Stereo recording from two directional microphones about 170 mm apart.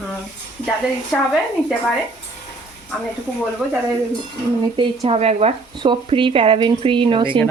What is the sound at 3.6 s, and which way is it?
Speech, 5° left (ahead or behind).